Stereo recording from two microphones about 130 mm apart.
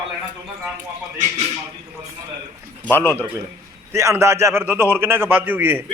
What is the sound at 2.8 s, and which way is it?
Speech, 10° left (ahead or behind).